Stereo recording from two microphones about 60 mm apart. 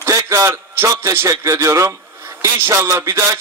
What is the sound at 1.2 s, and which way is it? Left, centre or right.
A man's voice, right.